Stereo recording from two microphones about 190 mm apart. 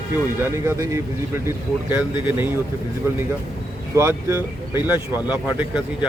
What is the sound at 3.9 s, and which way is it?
Speech, 15° right (ahead or behind).